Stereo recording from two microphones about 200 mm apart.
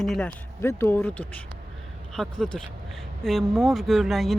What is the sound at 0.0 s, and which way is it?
Speech, 5° left (ahead or behind).